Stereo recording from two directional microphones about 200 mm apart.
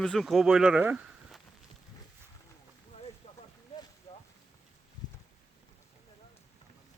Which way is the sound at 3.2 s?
35° left (ahead or behind).